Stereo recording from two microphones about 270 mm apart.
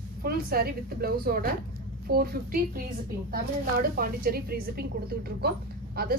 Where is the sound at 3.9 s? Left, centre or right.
Right.